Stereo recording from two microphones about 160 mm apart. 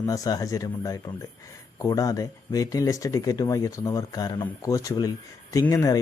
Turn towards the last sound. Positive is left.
turn(degrees=20)  # may be behind; listen again after turning